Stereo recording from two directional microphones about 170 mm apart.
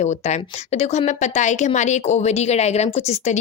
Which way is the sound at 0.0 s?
40° left (ahead or behind).